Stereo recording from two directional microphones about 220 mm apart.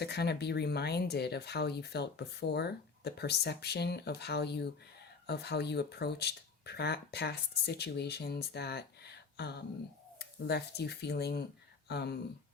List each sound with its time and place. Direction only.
0.0 s speech: 50° left (ahead or behind)